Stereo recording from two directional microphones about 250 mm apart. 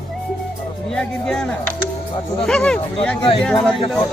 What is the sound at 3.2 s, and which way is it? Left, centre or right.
Speech, left.